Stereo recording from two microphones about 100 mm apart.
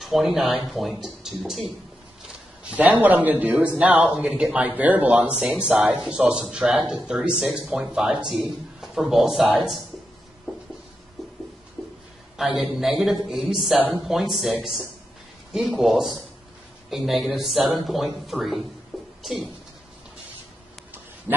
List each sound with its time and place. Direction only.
0.0 s speech: centre (ahead or behind)
2.2 s a man's voice: 10° right (ahead or behind)
10.5 s a sound: 5° right (ahead or behind)
12.4 s speech: centre (ahead or behind)
18.9 s music: centre (ahead or behind)
19.2 s speech: centre (ahead or behind)